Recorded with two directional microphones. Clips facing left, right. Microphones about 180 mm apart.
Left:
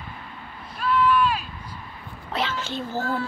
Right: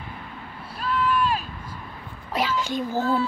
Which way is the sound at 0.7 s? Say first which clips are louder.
Left 3 dB; 40° right (ahead or behind).